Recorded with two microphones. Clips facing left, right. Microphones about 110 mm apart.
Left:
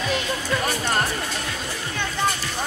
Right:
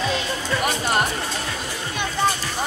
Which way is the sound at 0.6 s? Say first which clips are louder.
Right 5 dB; 15° right (ahead or behind).